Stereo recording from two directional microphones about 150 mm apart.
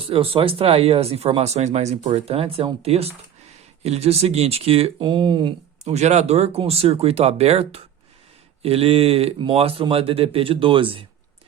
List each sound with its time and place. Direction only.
0.0 s speech: 40° right (ahead or behind)
5.8 s speech: 50° right (ahead or behind)